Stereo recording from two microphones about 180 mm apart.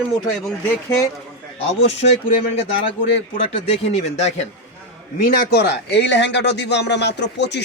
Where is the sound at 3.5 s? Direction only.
35° left (ahead or behind).